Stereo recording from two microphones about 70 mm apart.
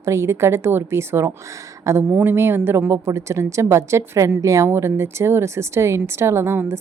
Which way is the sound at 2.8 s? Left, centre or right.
Right.